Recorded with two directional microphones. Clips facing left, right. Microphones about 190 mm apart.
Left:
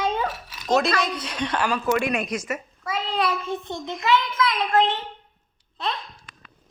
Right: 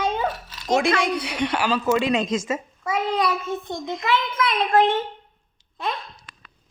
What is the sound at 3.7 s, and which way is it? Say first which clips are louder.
Speech: right 2 dB; 15° right (ahead or behind).